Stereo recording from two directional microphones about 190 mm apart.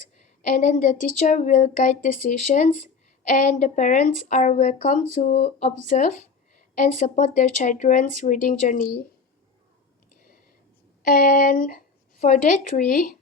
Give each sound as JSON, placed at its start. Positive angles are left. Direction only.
{"t": 0.5, "sound": "a woman's voice", "side_deg": 40}
{"t": 11.0, "sound": "a woman's voice", "side_deg": 50}